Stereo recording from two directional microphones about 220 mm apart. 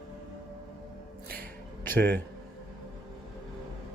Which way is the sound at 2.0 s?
45° right (ahead or behind).